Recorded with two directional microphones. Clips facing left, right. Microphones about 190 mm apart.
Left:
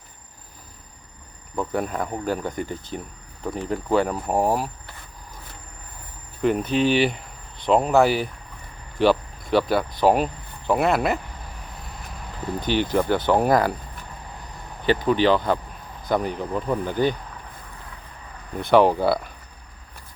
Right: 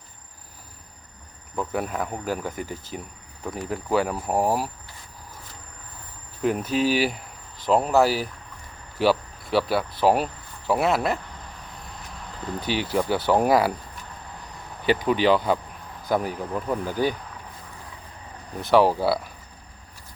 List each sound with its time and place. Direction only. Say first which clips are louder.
1.5 s cricket: left 2 dB; 5° right (ahead or behind)
3.7 s speech: left 2 dB; 5° right (ahead or behind)
6.4 s cricket: left 2 dB; 5° right (ahead or behind)
9.0 s speech: left 2 dB; 5° right (ahead or behind)
9.5 s cricket: left 2 dB; 5° right (ahead or behind)
12.6 s speech: left 3 dB; 5° right (ahead or behind)
14.8 s speech: left 1 dB; 10° right (ahead or behind)
16.0 s cricket: left 1 dB; 5° right (ahead or behind)
18.6 s cricket: left 2 dB; centre (ahead or behind)